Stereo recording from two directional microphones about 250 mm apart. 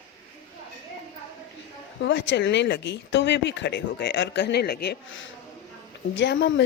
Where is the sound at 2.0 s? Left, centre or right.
Left.